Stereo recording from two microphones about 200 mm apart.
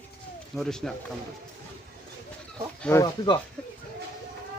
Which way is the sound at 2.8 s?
15° left (ahead or behind).